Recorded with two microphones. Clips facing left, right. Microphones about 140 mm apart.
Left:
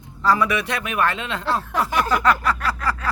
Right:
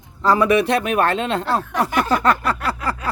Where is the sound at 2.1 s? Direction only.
30° right (ahead or behind).